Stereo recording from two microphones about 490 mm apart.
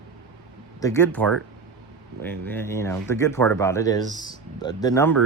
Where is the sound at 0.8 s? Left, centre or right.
Centre.